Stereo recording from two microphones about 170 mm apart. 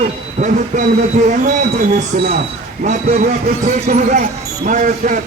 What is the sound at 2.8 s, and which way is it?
A man's voice, 45° right (ahead or behind).